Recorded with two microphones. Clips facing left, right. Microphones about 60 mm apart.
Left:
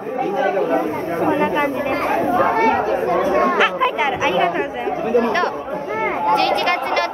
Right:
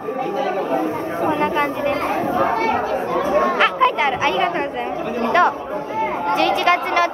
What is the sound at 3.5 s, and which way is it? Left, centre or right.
Chatter, centre.